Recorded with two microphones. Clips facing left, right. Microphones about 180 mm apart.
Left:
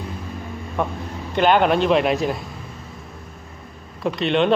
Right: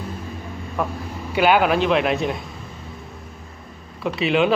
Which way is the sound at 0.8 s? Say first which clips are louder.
Left 1 dB; centre (ahead or behind).